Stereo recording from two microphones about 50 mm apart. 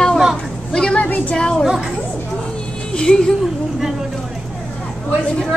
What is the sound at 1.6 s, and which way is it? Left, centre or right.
Speech, centre.